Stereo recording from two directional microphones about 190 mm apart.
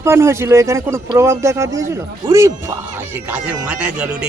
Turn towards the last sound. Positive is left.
turn(degrees=-5)  # may be behind; listen again after turning